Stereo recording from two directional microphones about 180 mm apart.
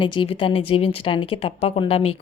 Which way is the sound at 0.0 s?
25° left (ahead or behind).